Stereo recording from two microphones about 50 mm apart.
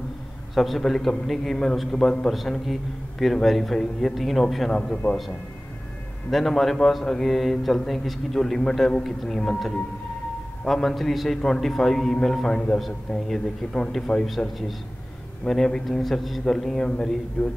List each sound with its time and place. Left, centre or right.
0.6 s a man's voice: centre
5.0 s a man's voice: left
6.3 s a man's voice: centre
10.7 s a man's voice: centre
15.4 s a man's voice: centre